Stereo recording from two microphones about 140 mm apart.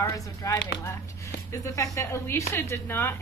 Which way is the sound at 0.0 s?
20° left (ahead or behind).